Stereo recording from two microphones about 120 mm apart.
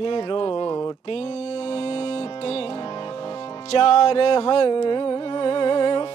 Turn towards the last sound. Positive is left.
turn(degrees=50)  # may be behind; listen again after turning